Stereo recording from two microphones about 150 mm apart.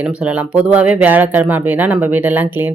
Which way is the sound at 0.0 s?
10° right (ahead or behind).